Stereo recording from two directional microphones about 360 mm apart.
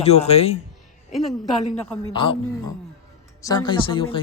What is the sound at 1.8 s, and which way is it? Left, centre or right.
Speech, centre.